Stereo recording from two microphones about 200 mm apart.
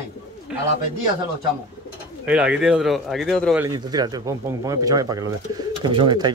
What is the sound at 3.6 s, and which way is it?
A man's voice, 20° right (ahead or behind).